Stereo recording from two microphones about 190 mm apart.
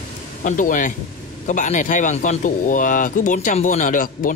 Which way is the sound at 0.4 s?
45° left (ahead or behind).